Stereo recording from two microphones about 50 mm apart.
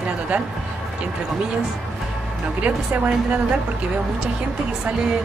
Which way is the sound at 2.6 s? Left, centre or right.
Right.